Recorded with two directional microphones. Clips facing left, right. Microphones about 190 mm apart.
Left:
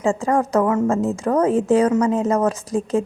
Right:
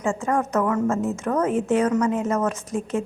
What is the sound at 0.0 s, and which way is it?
A woman's voice, 35° left (ahead or behind).